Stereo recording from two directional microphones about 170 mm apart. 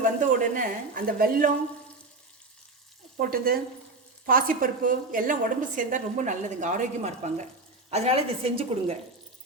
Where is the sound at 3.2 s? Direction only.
60° right (ahead or behind).